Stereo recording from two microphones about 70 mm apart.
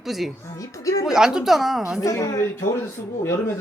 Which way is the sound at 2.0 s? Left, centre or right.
Left.